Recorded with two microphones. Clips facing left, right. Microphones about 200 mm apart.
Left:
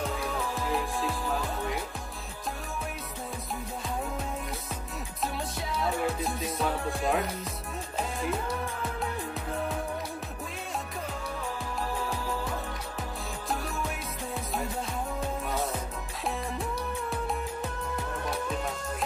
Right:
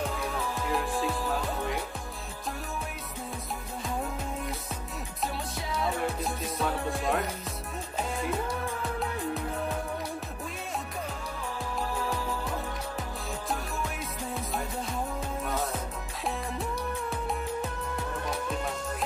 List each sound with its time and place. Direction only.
0.7 s music: centre (ahead or behind)
5.8 s music: centre (ahead or behind)
15.4 s music: centre (ahead or behind)
17.1 s music: centre (ahead or behind)